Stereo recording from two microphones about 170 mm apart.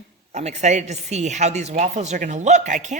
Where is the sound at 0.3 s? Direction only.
40° right (ahead or behind).